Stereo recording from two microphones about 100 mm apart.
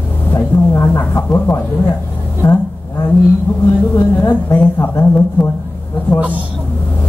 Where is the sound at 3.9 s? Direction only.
25° left (ahead or behind).